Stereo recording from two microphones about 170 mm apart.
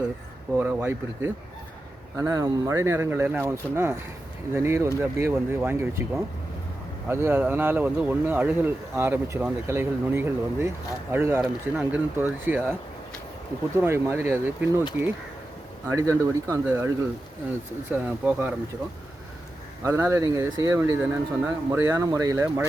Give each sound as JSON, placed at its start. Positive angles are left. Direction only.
{"t": 0.5, "sound": "speech", "side_deg": -10}
{"t": 7.1, "sound": "speech", "side_deg": -15}
{"t": 13.7, "sound": "speech", "side_deg": -15}
{"t": 15.9, "sound": "speech", "side_deg": -20}
{"t": 17.9, "sound": "speech", "side_deg": -10}
{"t": 19.8, "sound": "speech", "side_deg": -15}